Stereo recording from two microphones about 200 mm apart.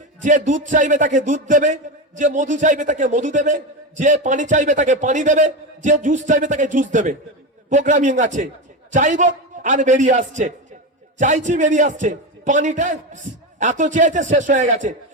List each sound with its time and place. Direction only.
0.2 s a man's voice: 40° right (ahead or behind)